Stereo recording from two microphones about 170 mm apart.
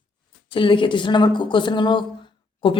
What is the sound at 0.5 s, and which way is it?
A woman's voice, 30° left (ahead or behind).